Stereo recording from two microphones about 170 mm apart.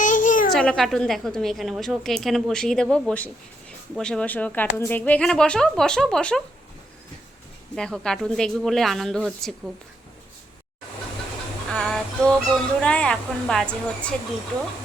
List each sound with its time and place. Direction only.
0.0 s a sound: 50° left (ahead or behind)
0.5 s a woman's voice: 5° left (ahead or behind)
7.8 s a woman's voice: 5° left (ahead or behind)
11.7 s a woman's voice: 5° left (ahead or behind)